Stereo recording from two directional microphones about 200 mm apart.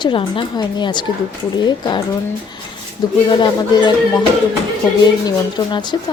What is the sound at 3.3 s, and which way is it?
Speech, 20° left (ahead or behind).